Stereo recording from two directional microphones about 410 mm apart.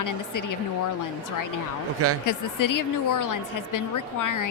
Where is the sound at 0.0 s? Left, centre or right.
Left.